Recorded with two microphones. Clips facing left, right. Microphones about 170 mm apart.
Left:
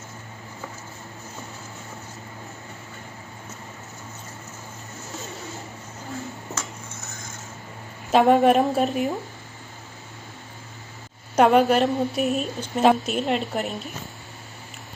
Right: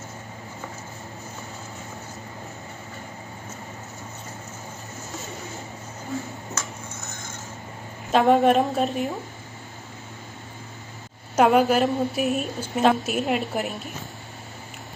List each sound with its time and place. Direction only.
5.3 s vehicle: 20° right (ahead or behind)
8.1 s a woman's voice: centre (ahead or behind)
11.3 s a woman's voice: centre (ahead or behind)